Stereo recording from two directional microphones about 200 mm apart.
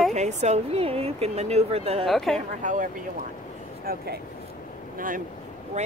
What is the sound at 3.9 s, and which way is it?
Speech, 45° right (ahead or behind).